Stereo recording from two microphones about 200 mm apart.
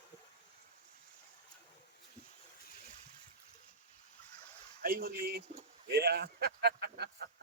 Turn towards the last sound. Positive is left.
turn(degrees=-55)  # may be behind; listen again after turning